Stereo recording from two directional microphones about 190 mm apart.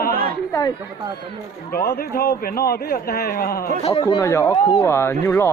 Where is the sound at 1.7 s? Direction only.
55° left (ahead or behind).